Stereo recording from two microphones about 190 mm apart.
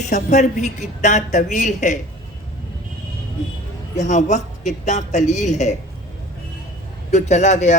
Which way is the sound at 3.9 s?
40° left (ahead or behind).